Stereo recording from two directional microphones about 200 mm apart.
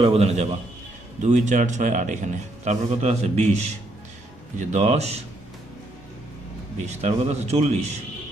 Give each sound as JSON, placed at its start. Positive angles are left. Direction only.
{"t": 0.0, "sound": "a man's voice", "side_deg": -30}
{"t": 6.7, "sound": "a man's voice", "side_deg": -35}